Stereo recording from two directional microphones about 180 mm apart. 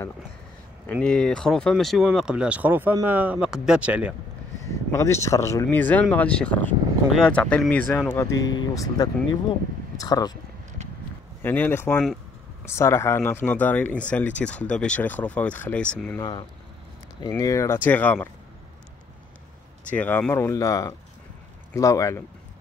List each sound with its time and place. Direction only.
1.0 s speech: 5° left (ahead or behind)
4.9 s speech: 15° left (ahead or behind)
11.4 s speech: 10° left (ahead or behind)
16.2 s speech: 25° left (ahead or behind); by 18.3 s 10° left (ahead or behind)
19.9 s speech: 10° left (ahead or behind)